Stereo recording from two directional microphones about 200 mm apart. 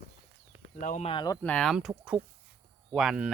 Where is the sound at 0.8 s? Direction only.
35° left (ahead or behind).